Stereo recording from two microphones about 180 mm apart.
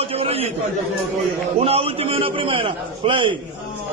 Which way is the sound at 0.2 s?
35° right (ahead or behind).